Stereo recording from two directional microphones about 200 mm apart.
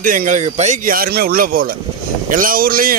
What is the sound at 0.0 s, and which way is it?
A man's voice, 40° right (ahead or behind).